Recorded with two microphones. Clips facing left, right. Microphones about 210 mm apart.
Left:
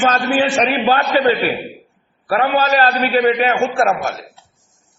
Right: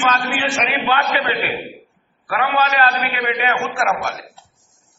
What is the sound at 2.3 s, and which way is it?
A man's voice, 40° left (ahead or behind).